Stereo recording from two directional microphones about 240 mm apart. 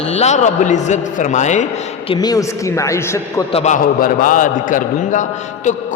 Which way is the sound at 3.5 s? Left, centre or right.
Left.